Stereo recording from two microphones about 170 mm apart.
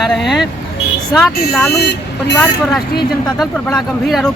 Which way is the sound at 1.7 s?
75° left (ahead or behind).